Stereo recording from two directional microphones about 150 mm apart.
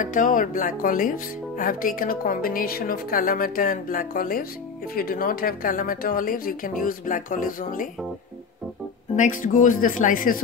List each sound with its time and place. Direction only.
0.0 s speech: 60° left (ahead or behind)
9.1 s speech: 60° left (ahead or behind)